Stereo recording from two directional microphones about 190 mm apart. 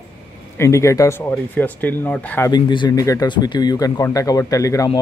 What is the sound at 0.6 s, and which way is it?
Speech, 15° left (ahead or behind).